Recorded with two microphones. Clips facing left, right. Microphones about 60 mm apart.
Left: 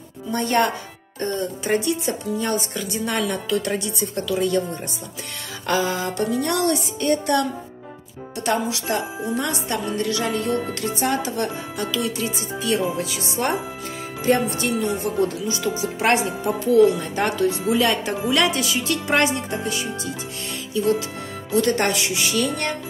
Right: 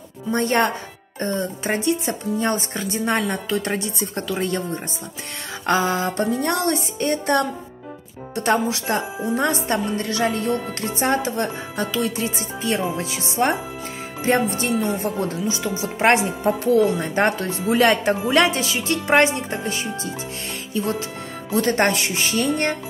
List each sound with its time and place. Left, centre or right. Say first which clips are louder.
0.3 s speech: right 1 dB; right
5.7 s speech: right 2 dB; right
8.5 s speech: right 2 dB; right
18.2 s speech: right 2 dB; right